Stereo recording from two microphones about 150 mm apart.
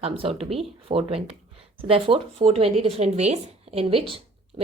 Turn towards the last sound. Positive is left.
turn(degrees=-35)  # may be behind; listen again after turning